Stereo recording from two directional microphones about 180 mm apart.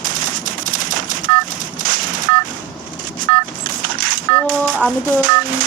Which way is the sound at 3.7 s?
50° right (ahead or behind).